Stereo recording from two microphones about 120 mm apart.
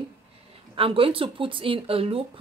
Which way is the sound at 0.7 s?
50° right (ahead or behind).